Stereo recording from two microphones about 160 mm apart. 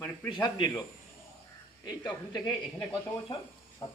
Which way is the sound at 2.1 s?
25° left (ahead or behind).